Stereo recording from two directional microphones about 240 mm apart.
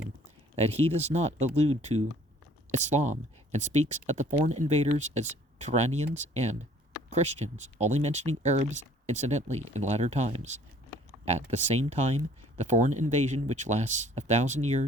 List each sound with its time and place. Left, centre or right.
0.5 s speech: right